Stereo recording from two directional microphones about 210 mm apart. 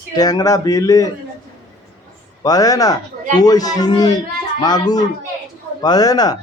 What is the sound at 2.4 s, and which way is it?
A man's voice, 15° left (ahead or behind).